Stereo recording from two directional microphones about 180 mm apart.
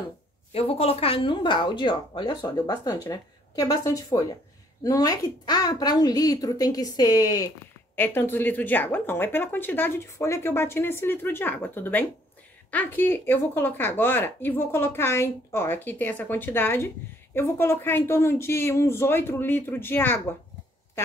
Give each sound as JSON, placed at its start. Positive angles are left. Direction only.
{"t": 0.5, "sound": "a woman's voice", "side_deg": 35}